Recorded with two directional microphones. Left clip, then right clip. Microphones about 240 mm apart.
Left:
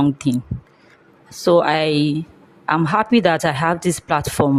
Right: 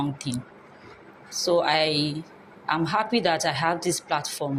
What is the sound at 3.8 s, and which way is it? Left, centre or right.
Speech, left.